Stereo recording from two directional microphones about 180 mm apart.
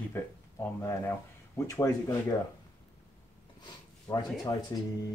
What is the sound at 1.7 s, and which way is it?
Speech, 15° left (ahead or behind).